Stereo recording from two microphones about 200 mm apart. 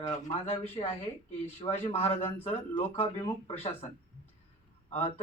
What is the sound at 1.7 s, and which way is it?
Speech, 30° left (ahead or behind).